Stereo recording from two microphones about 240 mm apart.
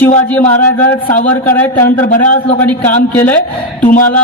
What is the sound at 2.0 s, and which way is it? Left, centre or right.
Speech, left.